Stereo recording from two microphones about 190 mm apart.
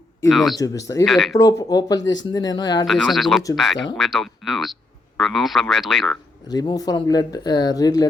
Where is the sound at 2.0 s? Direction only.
75° left (ahead or behind).